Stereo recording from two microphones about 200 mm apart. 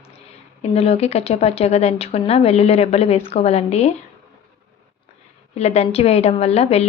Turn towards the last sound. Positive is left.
turn(degrees=30)  # may be behind; listen again after turning